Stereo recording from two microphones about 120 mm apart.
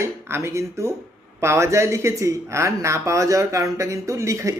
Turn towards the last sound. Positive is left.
turn(degrees=-25)  # may be behind; listen again after turning